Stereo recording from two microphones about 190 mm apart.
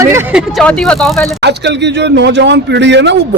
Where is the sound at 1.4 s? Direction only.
65° right (ahead or behind).